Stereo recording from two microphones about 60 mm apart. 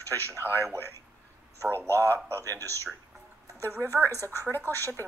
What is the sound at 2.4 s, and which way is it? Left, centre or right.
Speech, right.